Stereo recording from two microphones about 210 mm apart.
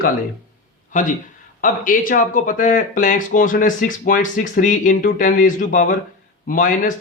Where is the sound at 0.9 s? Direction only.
35° left (ahead or behind).